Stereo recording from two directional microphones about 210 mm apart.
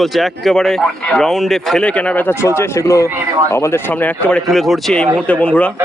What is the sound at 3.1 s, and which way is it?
Speech, 10° right (ahead or behind).